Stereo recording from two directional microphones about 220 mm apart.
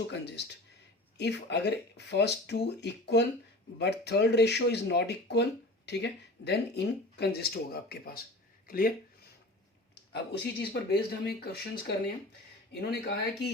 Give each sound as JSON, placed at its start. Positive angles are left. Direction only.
{"t": 0.1, "sound": "speech", "side_deg": 50}
{"t": 9.9, "sound": "speech", "side_deg": 50}